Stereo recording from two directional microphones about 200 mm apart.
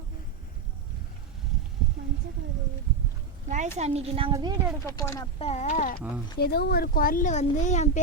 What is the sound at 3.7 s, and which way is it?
Speech, 30° right (ahead or behind).